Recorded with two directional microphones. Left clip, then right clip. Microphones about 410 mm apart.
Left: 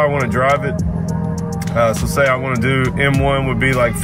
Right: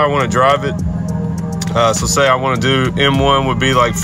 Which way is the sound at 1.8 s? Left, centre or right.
Centre.